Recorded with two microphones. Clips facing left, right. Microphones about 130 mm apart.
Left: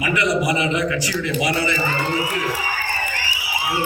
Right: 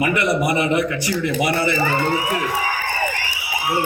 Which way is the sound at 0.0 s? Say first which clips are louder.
Right 1 dB; 55° right (ahead or behind).